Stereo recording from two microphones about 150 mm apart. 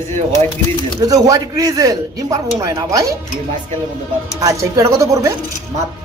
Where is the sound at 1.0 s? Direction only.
25° right (ahead or behind).